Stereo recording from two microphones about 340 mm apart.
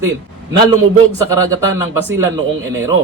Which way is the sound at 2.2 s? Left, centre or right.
Centre.